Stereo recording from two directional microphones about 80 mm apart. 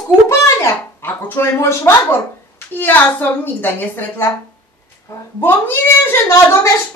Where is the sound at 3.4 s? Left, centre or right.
Left.